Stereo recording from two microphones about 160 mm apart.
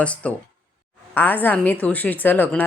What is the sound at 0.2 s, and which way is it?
Speech, 10° left (ahead or behind).